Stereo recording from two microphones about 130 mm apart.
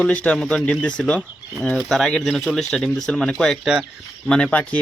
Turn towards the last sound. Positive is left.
turn(degrees=10)  # may be behind; listen again after turning